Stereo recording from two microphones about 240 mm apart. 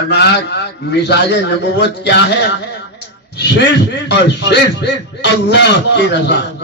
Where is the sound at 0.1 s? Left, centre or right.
Left.